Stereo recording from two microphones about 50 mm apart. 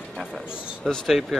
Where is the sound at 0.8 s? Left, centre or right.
Centre.